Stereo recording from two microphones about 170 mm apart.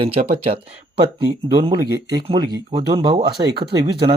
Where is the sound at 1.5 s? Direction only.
25° right (ahead or behind).